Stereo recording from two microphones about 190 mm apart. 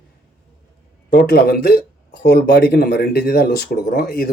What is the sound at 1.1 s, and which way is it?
Speech, 55° left (ahead or behind).